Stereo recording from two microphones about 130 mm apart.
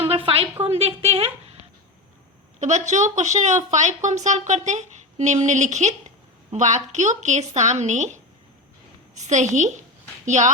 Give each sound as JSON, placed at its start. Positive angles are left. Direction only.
{"t": 0.0, "sound": "a sound", "side_deg": -45}
{"t": 0.6, "sound": "a woman's voice", "side_deg": -50}
{"t": 2.6, "sound": "a woman's voice", "side_deg": -65}